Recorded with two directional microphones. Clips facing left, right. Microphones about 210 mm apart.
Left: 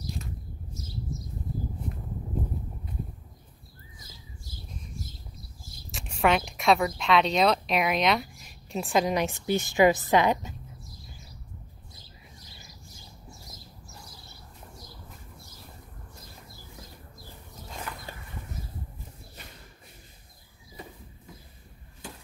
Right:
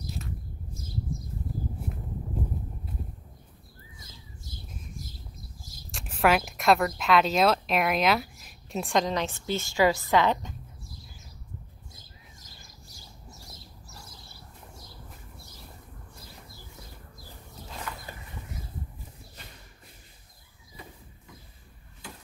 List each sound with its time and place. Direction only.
5.9 s speech: centre (ahead or behind)
9.0 s a woman's voice: 10° left (ahead or behind)
11.9 s a sound: 45° right (ahead or behind)